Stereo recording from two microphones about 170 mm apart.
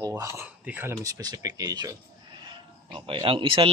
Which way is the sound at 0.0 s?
15° right (ahead or behind).